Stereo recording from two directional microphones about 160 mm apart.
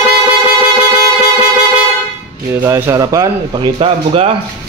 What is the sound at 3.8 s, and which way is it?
Speech, 40° right (ahead or behind).